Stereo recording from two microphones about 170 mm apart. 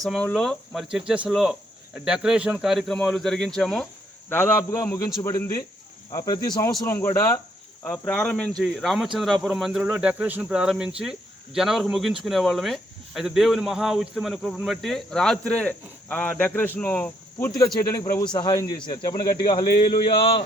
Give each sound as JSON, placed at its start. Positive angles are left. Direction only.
{"t": 0.0, "sound": "a man's voice", "side_deg": 5}